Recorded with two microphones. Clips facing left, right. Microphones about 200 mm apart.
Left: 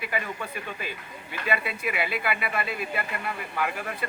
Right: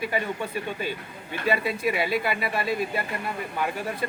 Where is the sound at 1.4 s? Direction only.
35° right (ahead or behind).